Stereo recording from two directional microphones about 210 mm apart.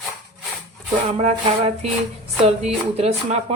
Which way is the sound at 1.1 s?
30° right (ahead or behind).